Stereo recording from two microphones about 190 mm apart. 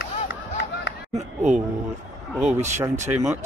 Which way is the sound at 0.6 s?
65° left (ahead or behind).